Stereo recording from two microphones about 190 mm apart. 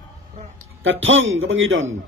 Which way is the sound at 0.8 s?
90° right.